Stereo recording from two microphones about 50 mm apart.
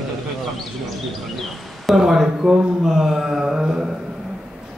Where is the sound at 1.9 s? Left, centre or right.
Centre.